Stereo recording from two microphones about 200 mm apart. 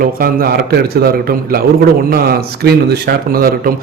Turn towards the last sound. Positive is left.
turn(degrees=-50)  # may be behind; listen again after turning